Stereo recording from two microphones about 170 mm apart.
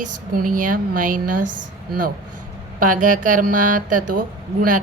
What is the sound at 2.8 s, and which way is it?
A woman's voice, 50° right (ahead or behind).